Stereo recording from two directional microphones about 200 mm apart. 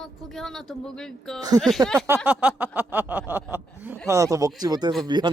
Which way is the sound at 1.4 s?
20° right (ahead or behind).